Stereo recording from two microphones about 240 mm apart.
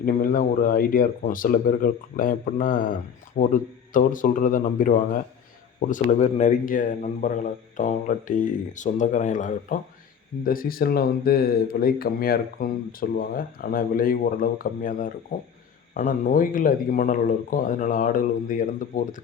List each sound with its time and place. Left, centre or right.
0.0 s speech: left